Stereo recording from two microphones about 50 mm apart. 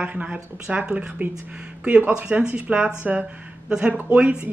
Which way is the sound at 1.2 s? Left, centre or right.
Right.